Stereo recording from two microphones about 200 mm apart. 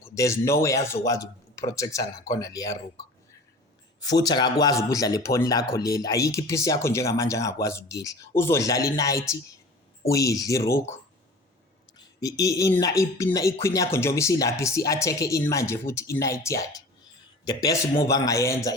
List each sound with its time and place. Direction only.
0.0 s speech: 15° left (ahead or behind)
4.0 s speech: 20° left (ahead or behind)
11.9 s a man's voice: 15° left (ahead or behind)